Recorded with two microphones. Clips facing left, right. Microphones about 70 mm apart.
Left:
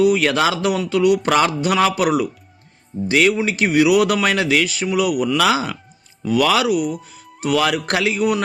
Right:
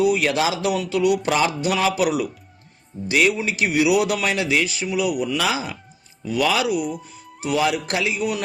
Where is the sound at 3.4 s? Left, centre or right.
Left.